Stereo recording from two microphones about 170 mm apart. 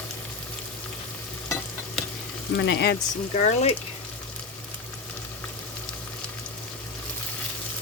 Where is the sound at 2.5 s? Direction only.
85° left.